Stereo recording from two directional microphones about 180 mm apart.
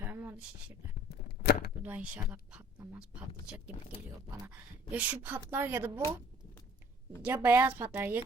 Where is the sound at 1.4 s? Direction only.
60° left (ahead or behind).